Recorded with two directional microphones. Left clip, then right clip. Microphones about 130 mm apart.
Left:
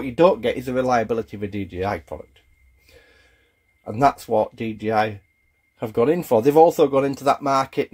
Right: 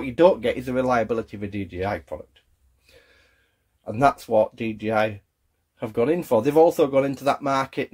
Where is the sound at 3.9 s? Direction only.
25° left (ahead or behind).